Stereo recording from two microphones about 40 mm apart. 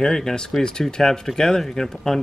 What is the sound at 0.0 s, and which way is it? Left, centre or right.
Speech, centre.